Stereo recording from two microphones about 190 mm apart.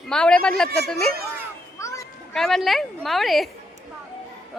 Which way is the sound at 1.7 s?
15° left (ahead or behind).